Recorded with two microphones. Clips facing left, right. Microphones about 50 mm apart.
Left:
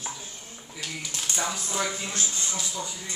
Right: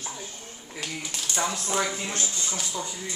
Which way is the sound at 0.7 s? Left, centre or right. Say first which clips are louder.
Right 2 dB; centre.